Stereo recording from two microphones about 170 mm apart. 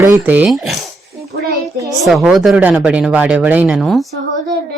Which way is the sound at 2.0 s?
Centre (ahead or behind).